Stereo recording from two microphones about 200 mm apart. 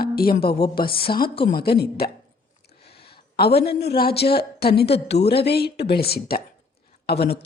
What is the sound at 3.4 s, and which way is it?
A woman's voice, 55° left (ahead or behind).